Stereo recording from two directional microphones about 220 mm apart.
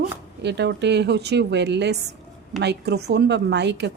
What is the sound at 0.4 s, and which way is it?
A woman's voice, 50° right (ahead or behind).